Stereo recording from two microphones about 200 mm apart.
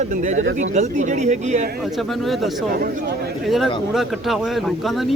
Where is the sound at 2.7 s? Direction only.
50° right (ahead or behind).